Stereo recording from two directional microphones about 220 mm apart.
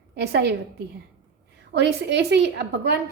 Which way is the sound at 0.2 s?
50° right (ahead or behind).